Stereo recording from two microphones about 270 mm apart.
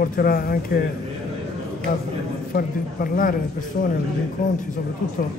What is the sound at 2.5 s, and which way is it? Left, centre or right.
Speech, left.